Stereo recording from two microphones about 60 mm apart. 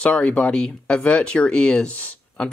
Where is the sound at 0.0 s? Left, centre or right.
Left.